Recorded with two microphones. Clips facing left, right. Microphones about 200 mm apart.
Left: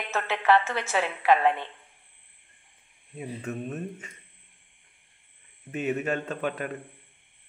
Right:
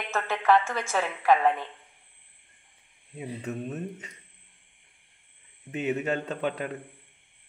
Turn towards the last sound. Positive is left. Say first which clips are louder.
# even
turn(degrees=-20)  # may be behind; listen again after turning